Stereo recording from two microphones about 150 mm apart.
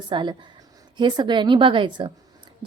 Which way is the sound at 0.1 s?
30° right (ahead or behind).